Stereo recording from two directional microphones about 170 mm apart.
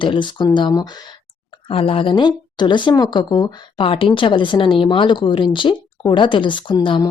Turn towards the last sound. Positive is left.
turn(degrees=25)  # may be behind; listen again after turning